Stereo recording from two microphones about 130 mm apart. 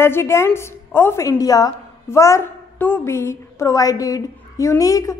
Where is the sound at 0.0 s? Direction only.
20° left (ahead or behind).